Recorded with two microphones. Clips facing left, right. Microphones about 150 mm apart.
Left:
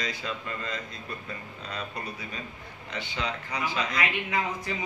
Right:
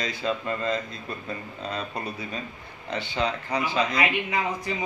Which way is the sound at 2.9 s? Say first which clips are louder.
Right 6 dB; 30° right (ahead or behind).